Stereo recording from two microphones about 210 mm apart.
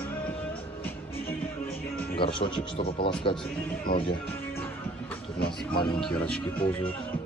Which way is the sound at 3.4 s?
5° left (ahead or behind).